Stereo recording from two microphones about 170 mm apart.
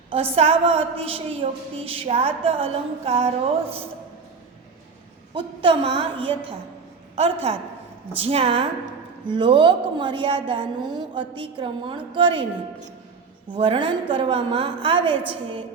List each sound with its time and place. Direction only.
0.1 s a woman's voice: 35° right (ahead or behind)
5.3 s a woman's voice: 30° right (ahead or behind)
7.2 s a woman's voice: 35° right (ahead or behind)
13.5 s a woman's voice: 30° right (ahead or behind)